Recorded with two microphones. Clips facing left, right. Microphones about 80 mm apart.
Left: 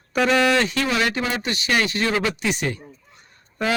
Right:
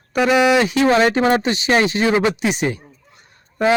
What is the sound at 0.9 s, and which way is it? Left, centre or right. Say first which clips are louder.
Speech: right 9 dB; right.